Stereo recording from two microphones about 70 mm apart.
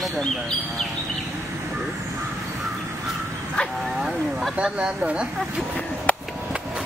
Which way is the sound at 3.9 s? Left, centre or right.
Centre.